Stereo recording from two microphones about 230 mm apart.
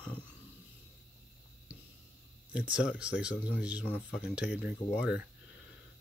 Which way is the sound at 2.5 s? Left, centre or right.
Centre.